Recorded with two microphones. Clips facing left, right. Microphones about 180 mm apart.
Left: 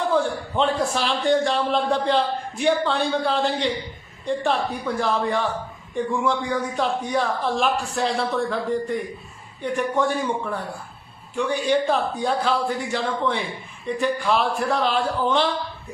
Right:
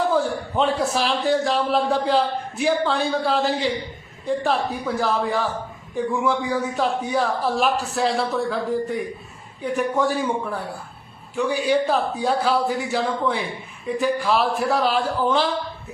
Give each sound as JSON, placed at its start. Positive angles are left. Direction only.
{"t": 0.1, "sound": "a man's voice", "side_deg": -5}